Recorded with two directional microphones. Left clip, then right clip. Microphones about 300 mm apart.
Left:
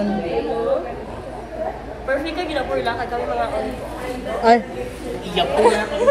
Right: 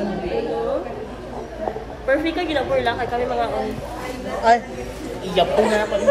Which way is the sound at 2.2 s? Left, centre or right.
Right.